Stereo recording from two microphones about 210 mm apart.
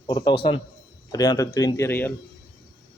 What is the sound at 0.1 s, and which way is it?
A man's voice, 25° left (ahead or behind).